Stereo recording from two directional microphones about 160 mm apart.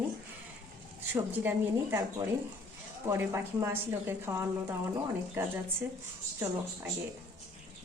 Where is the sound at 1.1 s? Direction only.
10° right (ahead or behind).